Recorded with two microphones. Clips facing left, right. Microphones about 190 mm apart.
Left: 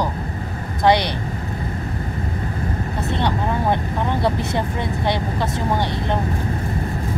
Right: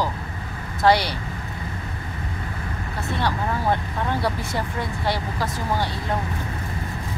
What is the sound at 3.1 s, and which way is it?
Vehicle, 20° left (ahead or behind).